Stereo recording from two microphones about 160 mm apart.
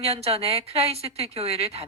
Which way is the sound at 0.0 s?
40° right (ahead or behind).